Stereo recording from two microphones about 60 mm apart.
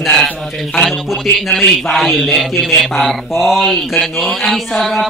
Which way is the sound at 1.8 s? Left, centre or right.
Centre.